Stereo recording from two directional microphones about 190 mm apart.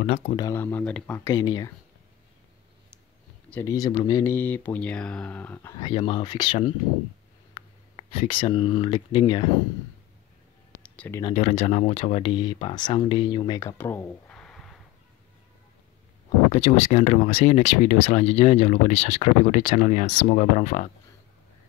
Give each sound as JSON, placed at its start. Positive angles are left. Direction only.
{"t": 0.0, "sound": "speech", "side_deg": 35}
{"t": 0.4, "sound": "speech", "side_deg": 15}
{"t": 3.6, "sound": "speech", "side_deg": 20}
{"t": 10.8, "sound": "a sound", "side_deg": 5}
{"t": 11.3, "sound": "speech", "side_deg": 35}
{"t": 16.5, "sound": "speech", "side_deg": 40}